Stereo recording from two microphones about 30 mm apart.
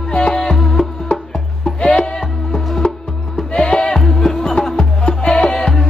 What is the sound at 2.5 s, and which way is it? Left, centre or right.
Music, centre.